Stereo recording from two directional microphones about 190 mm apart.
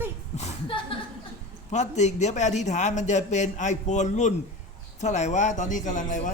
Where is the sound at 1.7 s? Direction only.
40° left (ahead or behind).